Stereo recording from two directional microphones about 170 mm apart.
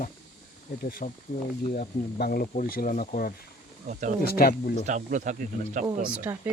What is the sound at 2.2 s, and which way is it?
Speech, 60° left (ahead or behind).